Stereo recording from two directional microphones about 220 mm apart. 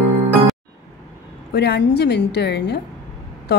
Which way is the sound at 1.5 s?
50° left (ahead or behind).